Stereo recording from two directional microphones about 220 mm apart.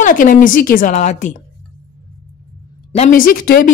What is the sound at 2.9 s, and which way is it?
Speech, 35° left (ahead or behind).